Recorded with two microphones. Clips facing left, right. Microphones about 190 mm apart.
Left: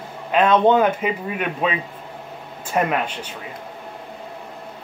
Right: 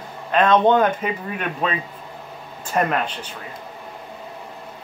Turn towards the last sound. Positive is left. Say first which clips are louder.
# even
turn(degrees=10)  # may be behind; listen again after turning